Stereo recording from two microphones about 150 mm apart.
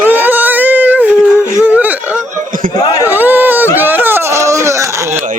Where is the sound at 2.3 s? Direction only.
60° right (ahead or behind).